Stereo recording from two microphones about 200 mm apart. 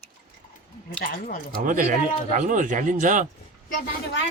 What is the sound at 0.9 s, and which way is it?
Speech, 45° left (ahead or behind).